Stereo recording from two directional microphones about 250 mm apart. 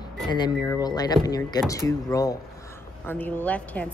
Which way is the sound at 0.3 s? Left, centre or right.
Centre.